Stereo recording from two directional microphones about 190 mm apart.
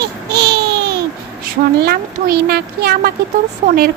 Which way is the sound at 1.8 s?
55° right (ahead or behind).